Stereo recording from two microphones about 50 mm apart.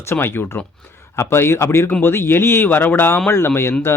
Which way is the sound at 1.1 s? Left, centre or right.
Left.